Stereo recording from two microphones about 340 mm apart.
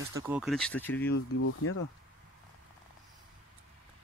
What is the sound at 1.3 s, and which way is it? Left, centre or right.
Speech, left.